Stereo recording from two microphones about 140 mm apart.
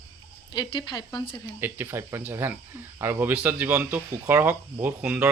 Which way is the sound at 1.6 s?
15° right (ahead or behind).